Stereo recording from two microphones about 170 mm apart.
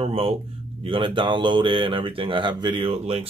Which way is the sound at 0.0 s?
35° right (ahead or behind).